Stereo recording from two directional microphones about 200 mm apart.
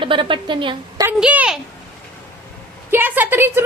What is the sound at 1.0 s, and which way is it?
Speech, 10° right (ahead or behind).